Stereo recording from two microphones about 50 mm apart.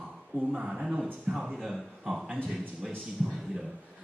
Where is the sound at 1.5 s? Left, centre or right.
Centre.